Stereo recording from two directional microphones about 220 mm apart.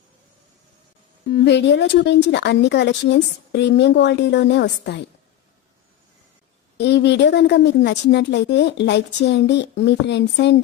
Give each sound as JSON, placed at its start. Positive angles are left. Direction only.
{"t": 1.3, "sound": "a woman's voice", "side_deg": 50}
{"t": 6.7, "sound": "a woman's voice", "side_deg": 50}